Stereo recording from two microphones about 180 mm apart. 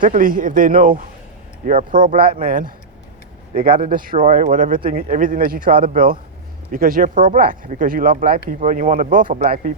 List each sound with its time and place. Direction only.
0.0 s speech: 50° right (ahead or behind)